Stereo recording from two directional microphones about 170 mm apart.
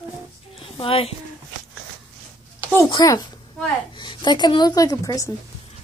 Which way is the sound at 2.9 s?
20° left (ahead or behind).